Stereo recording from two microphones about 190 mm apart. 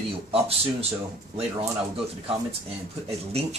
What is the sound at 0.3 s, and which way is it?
Speech, 30° right (ahead or behind).